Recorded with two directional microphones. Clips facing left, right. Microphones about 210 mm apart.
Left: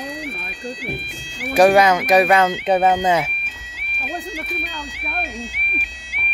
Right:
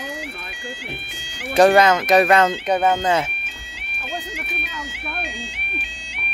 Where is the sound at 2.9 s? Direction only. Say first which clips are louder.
Left 2 dB; 10° left (ahead or behind).